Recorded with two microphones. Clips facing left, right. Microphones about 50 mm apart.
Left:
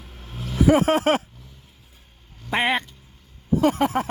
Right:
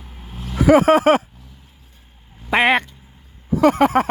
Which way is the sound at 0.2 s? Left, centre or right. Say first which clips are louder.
Right 1 dB; centre.